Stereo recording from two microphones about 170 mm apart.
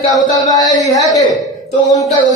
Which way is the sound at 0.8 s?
20° left (ahead or behind).